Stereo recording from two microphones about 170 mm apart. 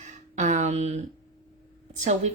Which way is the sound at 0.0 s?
45° right (ahead or behind).